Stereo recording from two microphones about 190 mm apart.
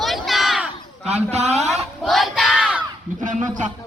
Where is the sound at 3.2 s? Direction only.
40° right (ahead or behind).